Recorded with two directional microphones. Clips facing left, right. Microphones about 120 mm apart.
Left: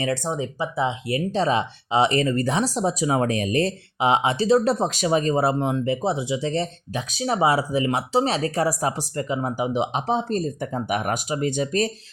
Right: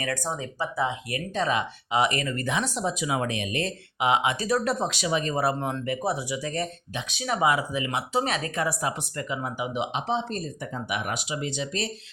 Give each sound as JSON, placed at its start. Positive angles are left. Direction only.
{"t": 0.0, "sound": "speech", "side_deg": 20}
{"t": 5.3, "sound": "speech", "side_deg": 25}